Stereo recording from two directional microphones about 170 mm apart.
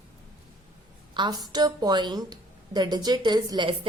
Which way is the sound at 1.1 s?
25° right (ahead or behind).